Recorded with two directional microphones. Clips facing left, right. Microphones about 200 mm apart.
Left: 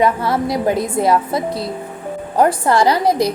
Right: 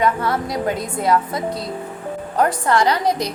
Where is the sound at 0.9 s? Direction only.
25° left (ahead or behind).